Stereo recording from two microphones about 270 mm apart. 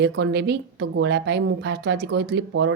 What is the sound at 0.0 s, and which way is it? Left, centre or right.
Speech, right.